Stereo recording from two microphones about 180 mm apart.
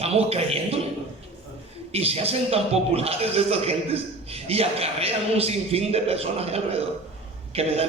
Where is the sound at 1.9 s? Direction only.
35° right (ahead or behind).